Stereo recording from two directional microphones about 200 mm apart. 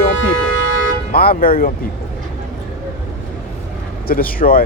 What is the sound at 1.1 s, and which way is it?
Speech, 45° left (ahead or behind).